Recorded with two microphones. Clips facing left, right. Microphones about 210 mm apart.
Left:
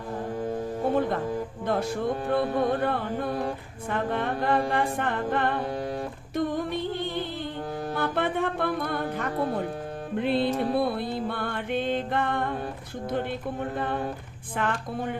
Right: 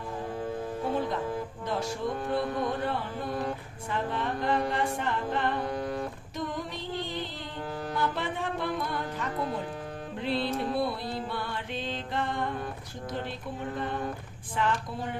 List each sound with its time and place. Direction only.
1.6 s music: 55° left (ahead or behind)
5.6 s music: 30° left (ahead or behind)
6.3 s female singing: 55° left (ahead or behind)
7.9 s speech: 55° left (ahead or behind)
10.2 s music: 55° left (ahead or behind)